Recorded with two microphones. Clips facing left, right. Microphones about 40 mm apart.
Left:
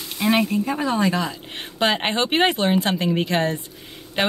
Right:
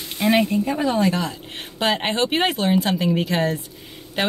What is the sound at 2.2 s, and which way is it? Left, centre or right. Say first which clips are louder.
Speech: left 3 dB; centre.